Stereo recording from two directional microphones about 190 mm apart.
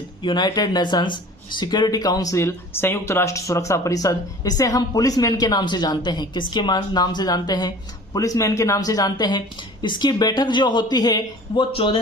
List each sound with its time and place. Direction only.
0.2 s speech: 25° left (ahead or behind)